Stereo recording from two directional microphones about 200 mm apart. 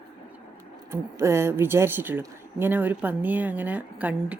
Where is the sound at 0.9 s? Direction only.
15° right (ahead or behind).